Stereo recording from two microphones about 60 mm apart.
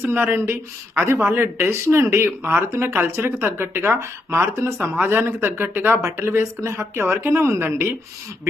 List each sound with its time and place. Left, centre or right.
0.0 s speech: right
3.9 s speech: right
4.9 s speech: right
6.1 s speech: right